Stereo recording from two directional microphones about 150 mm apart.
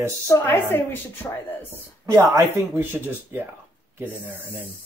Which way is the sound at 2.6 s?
15° right (ahead or behind).